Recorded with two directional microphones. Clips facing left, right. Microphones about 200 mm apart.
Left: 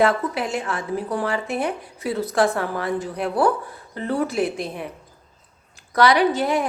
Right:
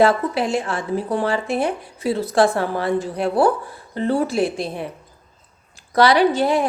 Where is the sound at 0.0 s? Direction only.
30° right (ahead or behind).